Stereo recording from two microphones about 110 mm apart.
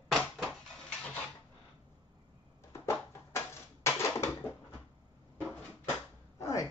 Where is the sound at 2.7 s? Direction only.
25° left (ahead or behind).